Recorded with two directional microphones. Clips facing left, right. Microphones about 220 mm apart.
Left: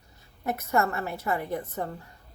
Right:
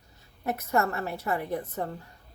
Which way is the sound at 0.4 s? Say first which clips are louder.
Left 1 dB; 40° right (ahead or behind).